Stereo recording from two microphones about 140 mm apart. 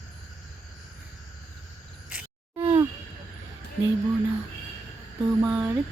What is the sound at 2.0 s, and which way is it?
Groan, 15° right (ahead or behind).